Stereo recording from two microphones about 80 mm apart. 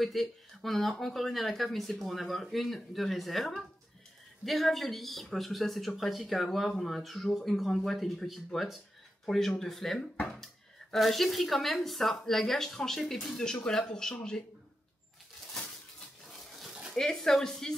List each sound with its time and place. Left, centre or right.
0.0 s speech: centre
10.1 s speech: centre
10.4 s speech: centre
15.4 s a sound: centre
16.9 s speech: centre